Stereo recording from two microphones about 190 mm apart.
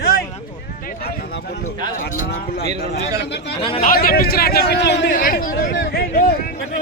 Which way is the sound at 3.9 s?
50° left (ahead or behind).